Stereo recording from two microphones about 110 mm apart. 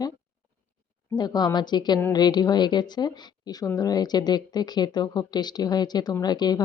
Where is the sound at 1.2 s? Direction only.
40° left (ahead or behind).